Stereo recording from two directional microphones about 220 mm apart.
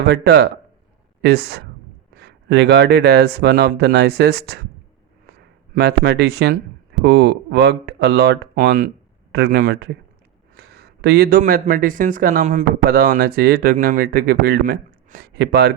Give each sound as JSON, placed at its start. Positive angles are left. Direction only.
{"t": 0.0, "sound": "speech", "side_deg": -50}
{"t": 5.7, "sound": "speech", "side_deg": -50}